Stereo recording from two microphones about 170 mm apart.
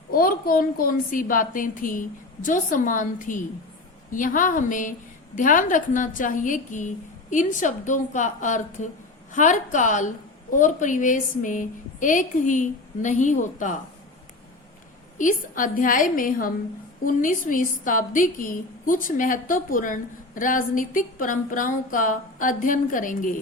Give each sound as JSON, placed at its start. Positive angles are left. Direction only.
{"t": 0.1, "sound": "a woman's voice", "side_deg": 55}
{"t": 15.2, "sound": "a woman's voice", "side_deg": 50}